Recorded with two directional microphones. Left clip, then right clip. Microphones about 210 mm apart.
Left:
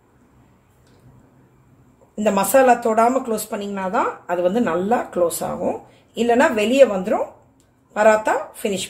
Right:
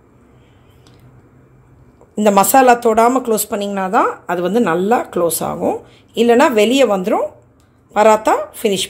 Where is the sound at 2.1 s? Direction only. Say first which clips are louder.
Right 6 dB; 45° right (ahead or behind).